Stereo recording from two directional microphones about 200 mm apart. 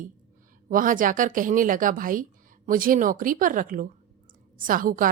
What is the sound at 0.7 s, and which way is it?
Speech, 40° right (ahead or behind).